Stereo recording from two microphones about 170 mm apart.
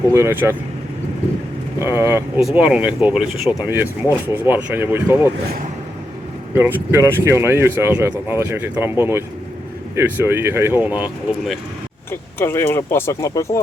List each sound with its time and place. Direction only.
0.1 s speech: 15° right (ahead or behind)
1.8 s speech: 15° right (ahead or behind)
6.5 s speech: 15° right (ahead or behind)
12.4 s speech: 15° left (ahead or behind)